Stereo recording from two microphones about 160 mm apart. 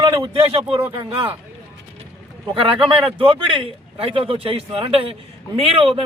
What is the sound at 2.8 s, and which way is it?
A man's voice, 35° right (ahead or behind).